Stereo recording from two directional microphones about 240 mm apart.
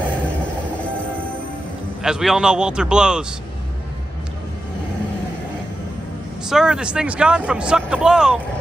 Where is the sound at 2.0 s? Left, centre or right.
Centre.